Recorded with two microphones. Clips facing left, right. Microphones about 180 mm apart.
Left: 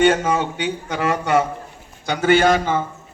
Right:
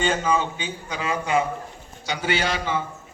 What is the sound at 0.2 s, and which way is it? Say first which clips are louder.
Speech: left 3 dB; 65° left (ahead or behind).